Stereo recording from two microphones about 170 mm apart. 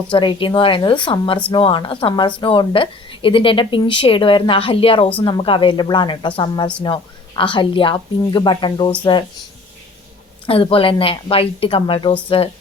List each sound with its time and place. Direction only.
0.1 s a woman's voice: 30° left (ahead or behind)
10.4 s a woman's voice: 30° left (ahead or behind)